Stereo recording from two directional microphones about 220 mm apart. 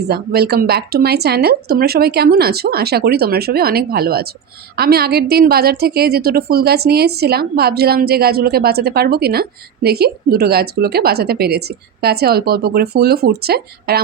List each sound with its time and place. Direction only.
0.1 s a woman's voice: 45° right (ahead or behind)